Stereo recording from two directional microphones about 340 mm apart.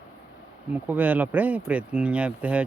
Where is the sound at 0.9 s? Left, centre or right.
Centre.